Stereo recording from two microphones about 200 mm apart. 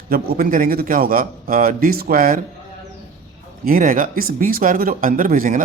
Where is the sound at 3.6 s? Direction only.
45° right (ahead or behind).